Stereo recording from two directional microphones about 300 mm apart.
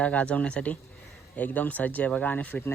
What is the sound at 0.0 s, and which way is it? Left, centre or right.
Speech, centre.